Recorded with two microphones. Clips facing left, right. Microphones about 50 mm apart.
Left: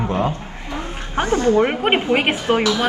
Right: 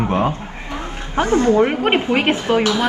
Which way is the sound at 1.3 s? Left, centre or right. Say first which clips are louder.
Right 1 dB; right.